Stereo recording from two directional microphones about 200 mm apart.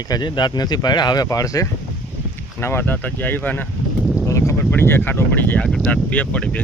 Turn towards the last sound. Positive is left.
turn(degrees=5)  # may be behind; listen again after turning